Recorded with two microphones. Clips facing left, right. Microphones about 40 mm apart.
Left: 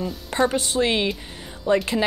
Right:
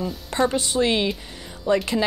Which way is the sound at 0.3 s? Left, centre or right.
Left.